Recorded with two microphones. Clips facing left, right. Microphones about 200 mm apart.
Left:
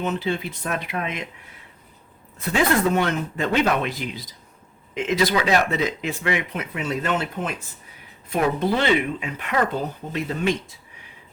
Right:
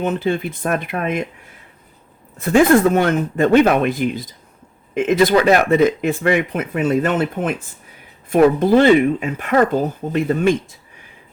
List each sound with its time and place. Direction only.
0.0 s speech: 50° right (ahead or behind)
2.4 s speech: 50° right (ahead or behind)